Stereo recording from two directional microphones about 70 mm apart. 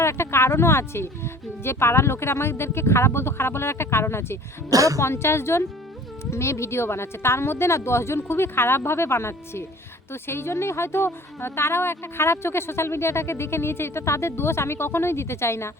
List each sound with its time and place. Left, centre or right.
0.0 s speech: left
4.7 s a woman's voice: right
4.9 s speech: left